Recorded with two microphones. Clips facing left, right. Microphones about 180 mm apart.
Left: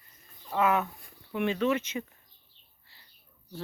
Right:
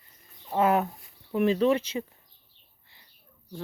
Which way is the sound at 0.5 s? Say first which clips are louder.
Right 3 dB; 35° right (ahead or behind).